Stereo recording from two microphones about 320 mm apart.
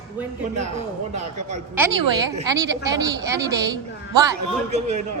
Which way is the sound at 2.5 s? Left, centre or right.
Centre.